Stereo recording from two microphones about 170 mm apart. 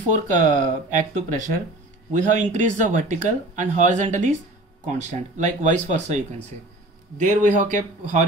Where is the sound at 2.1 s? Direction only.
45° right (ahead or behind).